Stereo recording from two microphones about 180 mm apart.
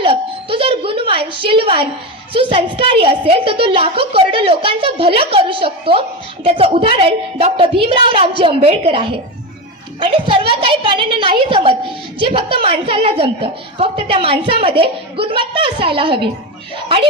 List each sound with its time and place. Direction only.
0.0 s doorbell: 30° right (ahead or behind)
2.3 s a woman's voice: 30° right (ahead or behind)